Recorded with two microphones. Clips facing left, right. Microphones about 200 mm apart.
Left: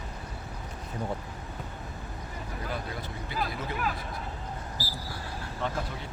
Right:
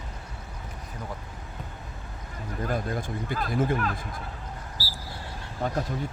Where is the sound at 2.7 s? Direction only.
50° right (ahead or behind).